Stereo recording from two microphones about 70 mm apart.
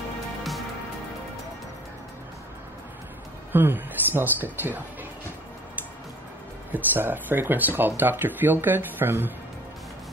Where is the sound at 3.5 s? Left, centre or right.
Right.